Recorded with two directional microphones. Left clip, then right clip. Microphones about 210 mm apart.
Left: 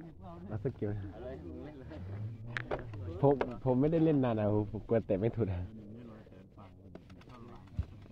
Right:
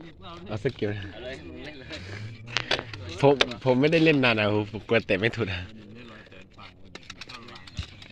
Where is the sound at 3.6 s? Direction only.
45° right (ahead or behind).